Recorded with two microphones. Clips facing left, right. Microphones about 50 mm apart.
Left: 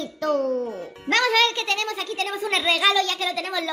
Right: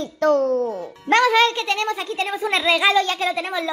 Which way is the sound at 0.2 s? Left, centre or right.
Right.